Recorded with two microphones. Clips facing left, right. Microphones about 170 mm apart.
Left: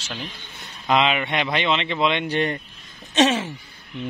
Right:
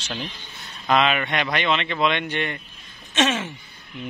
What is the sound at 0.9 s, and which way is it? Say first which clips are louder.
Speech: even; 20° left (ahead or behind).